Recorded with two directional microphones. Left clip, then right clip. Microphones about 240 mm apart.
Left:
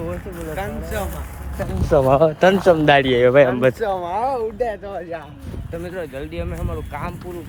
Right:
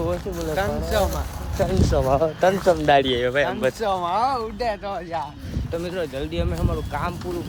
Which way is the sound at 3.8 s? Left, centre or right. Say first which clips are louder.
Left 1 dB; right.